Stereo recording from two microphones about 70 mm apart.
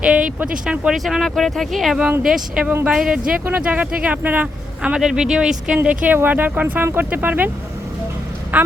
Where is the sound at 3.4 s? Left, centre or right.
Right.